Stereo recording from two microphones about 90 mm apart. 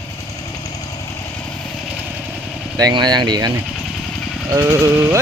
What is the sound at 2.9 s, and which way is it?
Speech, 55° right (ahead or behind).